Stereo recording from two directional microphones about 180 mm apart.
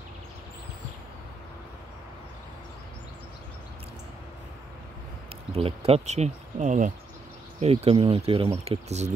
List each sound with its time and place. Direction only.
5.5 s speech: 35° right (ahead or behind)